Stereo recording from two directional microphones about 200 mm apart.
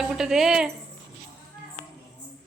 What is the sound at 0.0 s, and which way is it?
Speech, centre (ahead or behind).